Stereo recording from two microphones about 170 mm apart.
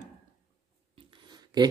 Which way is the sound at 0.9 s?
25° right (ahead or behind).